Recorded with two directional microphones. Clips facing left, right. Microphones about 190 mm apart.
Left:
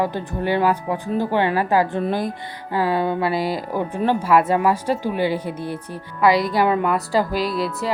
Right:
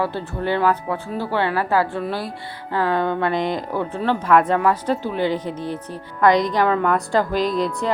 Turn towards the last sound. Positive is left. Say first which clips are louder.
# right 2 dB
turn(degrees=5)  # may be behind; listen again after turning